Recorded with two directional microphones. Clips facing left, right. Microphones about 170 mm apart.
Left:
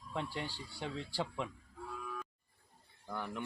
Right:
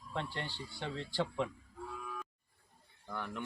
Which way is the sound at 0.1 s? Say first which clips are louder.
Even; 5° left (ahead or behind).